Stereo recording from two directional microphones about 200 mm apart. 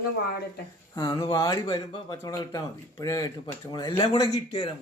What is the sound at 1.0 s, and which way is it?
Speech, 20° left (ahead or behind).